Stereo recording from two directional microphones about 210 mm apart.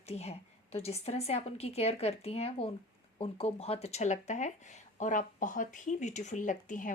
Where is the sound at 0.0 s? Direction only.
30° left (ahead or behind).